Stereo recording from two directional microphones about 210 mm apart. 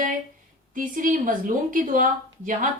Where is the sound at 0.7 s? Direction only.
40° right (ahead or behind).